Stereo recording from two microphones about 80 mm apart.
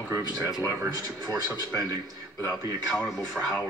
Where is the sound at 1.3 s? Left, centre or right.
Right.